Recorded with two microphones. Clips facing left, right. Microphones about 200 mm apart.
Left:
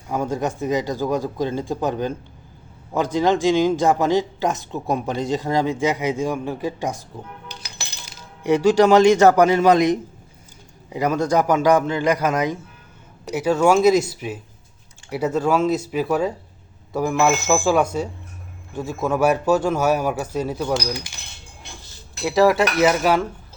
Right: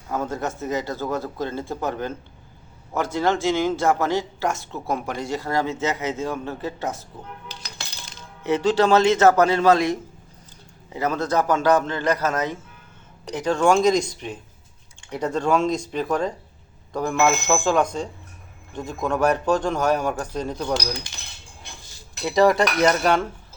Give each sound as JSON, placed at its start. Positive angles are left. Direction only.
{"t": 0.1, "sound": "a man's voice", "side_deg": 15}
{"t": 22.2, "sound": "cutlery", "side_deg": 5}